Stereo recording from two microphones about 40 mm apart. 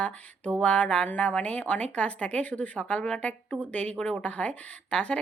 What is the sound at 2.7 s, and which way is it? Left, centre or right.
Speech, left.